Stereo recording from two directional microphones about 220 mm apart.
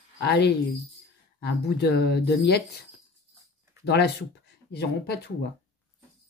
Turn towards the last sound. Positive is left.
turn(degrees=45)  # may be behind; listen again after turning